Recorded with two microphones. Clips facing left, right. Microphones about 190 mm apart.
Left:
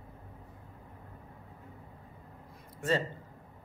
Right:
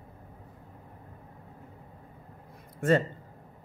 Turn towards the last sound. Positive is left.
turn(degrees=-55)  # may be behind; listen again after turning